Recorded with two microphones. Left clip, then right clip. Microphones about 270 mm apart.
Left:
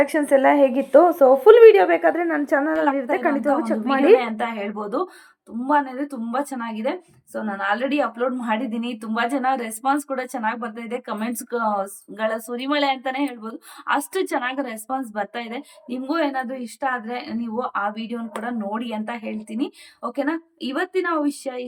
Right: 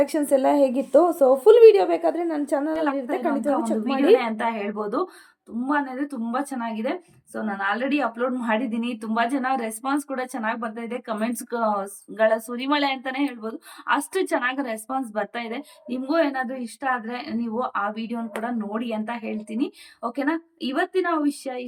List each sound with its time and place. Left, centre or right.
0.0 s a woman's voice: centre